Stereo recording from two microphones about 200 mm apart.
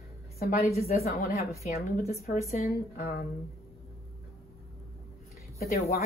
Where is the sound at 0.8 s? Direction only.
50° left (ahead or behind).